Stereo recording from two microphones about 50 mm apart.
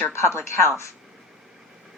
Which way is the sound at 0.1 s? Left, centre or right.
Left.